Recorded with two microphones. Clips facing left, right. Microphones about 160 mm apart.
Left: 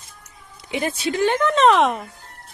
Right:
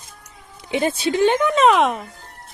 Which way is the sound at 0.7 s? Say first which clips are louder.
Right 3 dB; 25° right (ahead or behind).